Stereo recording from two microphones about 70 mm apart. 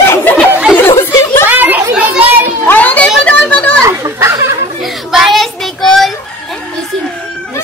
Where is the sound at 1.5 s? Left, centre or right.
Right.